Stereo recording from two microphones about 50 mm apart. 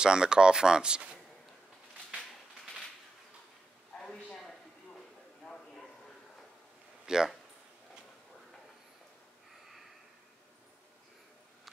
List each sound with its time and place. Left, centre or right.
0.0 s speech: centre
4.0 s a sound: centre
7.1 s speech: centre